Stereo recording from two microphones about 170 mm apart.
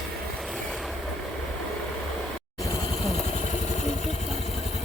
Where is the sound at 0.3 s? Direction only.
Centre (ahead or behind).